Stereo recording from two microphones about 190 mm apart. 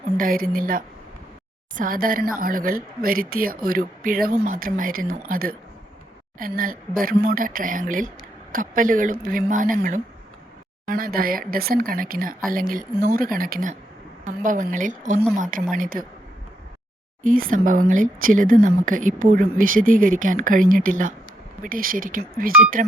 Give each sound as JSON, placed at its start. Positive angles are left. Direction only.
{"t": 0.2, "sound": "speech", "side_deg": -50}
{"t": 17.2, "sound": "speech", "side_deg": -45}